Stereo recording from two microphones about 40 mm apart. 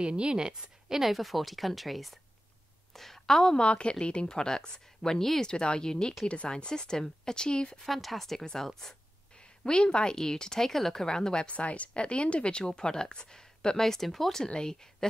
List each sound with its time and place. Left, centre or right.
0.0 s a woman's voice: right
1.1 s a woman's voice: centre
3.6 s speech: left
4.3 s a woman's voice: centre
5.5 s speech: left
7.8 s a woman's voice: centre
11.4 s a woman's voice: left; by 15.0 s centre